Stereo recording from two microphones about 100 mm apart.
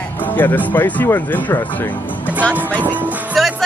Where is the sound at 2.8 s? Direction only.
15° right (ahead or behind).